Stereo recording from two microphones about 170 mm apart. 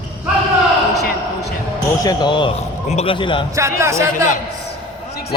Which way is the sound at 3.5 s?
15° right (ahead or behind).